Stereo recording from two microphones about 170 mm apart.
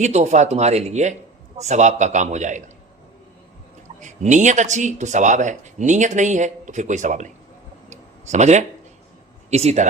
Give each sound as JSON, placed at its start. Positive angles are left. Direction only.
{"t": 0.0, "sound": "speech", "side_deg": -40}
{"t": 4.0, "sound": "speech", "side_deg": -45}
{"t": 7.9, "sound": "a sound", "side_deg": -45}
{"t": 9.5, "sound": "speech", "side_deg": -40}